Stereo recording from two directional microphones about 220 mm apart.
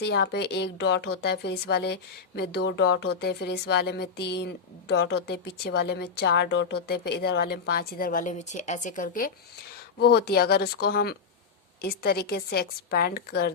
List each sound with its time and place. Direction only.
0.0 s speech: 50° left (ahead or behind)